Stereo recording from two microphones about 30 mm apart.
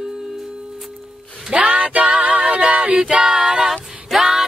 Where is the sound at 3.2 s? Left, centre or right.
Centre.